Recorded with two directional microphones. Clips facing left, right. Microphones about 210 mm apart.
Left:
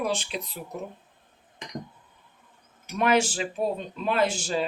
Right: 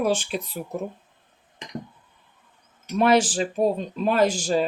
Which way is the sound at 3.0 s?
35° right (ahead or behind).